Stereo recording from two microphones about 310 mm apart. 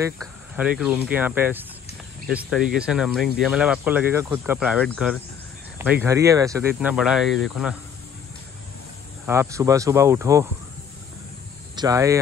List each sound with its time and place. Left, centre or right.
0.2 s speech: centre
9.2 s speech: centre
11.7 s speech: centre